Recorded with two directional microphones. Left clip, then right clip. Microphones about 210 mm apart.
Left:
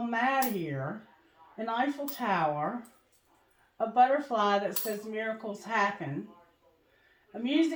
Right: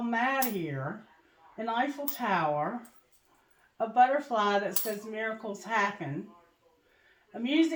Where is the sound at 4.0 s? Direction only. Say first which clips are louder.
Even; 30° right (ahead or behind).